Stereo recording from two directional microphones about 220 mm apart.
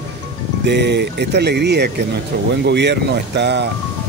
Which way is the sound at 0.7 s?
50° right (ahead or behind).